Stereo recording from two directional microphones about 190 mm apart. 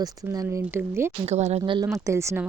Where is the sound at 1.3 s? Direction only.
35° right (ahead or behind).